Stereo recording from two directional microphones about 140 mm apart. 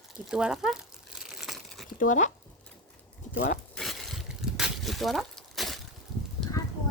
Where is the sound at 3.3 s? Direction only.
70° left (ahead or behind).